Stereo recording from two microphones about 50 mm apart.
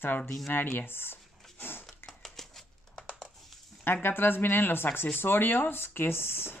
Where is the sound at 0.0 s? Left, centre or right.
Left.